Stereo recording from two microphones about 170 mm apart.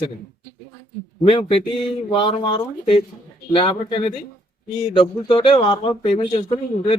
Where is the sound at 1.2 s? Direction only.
30° left (ahead or behind).